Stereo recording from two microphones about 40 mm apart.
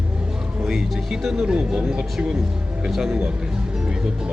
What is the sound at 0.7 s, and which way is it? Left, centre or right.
Speech, centre.